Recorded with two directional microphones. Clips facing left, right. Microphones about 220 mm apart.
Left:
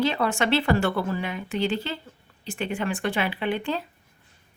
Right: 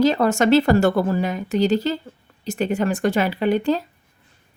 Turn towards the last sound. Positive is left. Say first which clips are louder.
# right 8 dB
turn(degrees=-40)  # may be behind; listen again after turning